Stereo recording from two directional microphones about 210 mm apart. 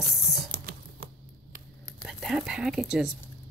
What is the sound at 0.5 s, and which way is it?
Typing, 45° right (ahead or behind).